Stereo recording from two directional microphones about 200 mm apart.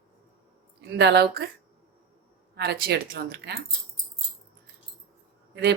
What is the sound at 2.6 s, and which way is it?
Speech, 55° right (ahead or behind).